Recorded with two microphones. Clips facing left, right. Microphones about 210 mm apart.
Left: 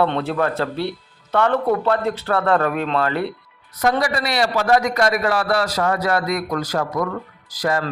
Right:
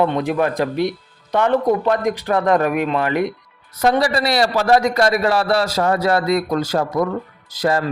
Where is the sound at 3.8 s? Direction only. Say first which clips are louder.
Right 3 dB; 30° right (ahead or behind).